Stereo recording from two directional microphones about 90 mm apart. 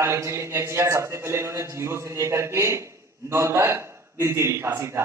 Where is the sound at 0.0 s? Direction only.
30° right (ahead or behind).